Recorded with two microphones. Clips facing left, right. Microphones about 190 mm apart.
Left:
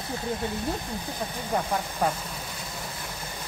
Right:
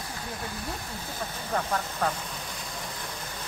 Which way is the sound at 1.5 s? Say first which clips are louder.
Left 1 dB; 15° left (ahead or behind).